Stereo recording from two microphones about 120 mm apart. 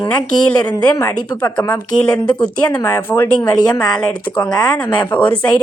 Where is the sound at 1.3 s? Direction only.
15° left (ahead or behind).